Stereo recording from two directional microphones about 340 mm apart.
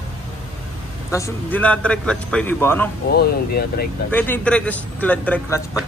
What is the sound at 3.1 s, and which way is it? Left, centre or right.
Speech, left.